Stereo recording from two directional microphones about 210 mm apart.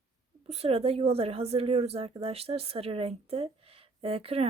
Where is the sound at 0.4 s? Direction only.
30° right (ahead or behind).